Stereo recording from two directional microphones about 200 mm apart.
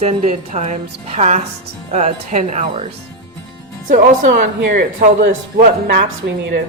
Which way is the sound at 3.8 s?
40° right (ahead or behind).